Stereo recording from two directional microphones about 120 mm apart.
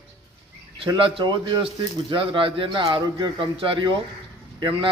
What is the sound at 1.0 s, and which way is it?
A man's voice, 45° right (ahead or behind).